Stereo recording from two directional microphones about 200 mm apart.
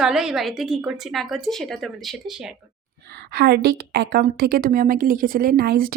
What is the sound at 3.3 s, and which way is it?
A woman's voice, 55° right (ahead or behind).